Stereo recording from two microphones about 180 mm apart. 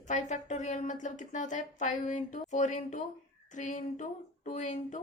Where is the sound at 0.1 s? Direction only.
45° left (ahead or behind).